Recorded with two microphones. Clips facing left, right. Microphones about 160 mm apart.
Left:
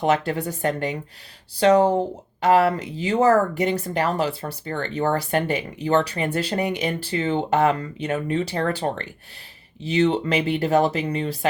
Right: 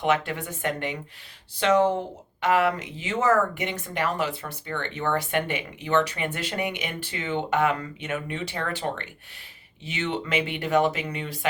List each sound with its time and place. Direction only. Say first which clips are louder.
0.0 s speech: left 4 dB; 35° left (ahead or behind)